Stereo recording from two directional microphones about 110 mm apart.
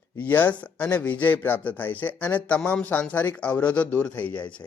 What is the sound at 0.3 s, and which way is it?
A man's voice, 15° left (ahead or behind).